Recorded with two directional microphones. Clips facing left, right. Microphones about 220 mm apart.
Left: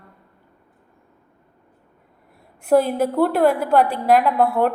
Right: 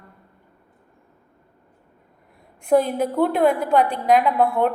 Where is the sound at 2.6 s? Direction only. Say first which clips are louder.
Left 2 dB; 5° left (ahead or behind).